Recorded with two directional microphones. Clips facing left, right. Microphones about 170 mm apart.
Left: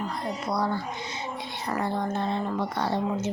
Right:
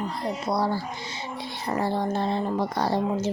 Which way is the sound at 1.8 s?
30° right (ahead or behind).